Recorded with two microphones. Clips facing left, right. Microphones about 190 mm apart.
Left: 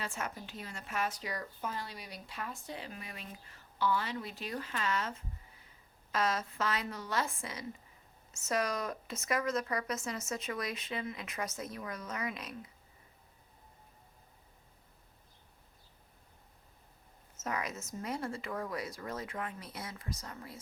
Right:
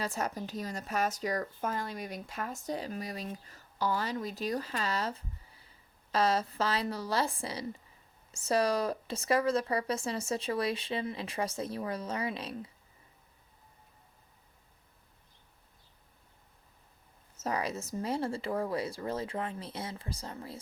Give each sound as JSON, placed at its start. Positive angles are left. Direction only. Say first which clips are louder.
{"t": 0.0, "sound": "speech", "louder": "right 6 dB", "side_deg": -40}
{"t": 17.4, "sound": "speech", "louder": "right 4 dB", "side_deg": -30}